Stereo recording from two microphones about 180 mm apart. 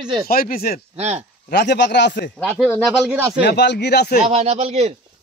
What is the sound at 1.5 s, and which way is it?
Speech, 70° left (ahead or behind).